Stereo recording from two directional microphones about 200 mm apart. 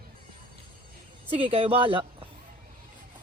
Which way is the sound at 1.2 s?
25° right (ahead or behind).